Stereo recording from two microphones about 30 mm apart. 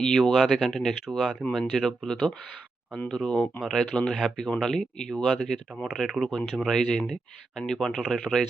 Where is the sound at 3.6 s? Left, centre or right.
Centre.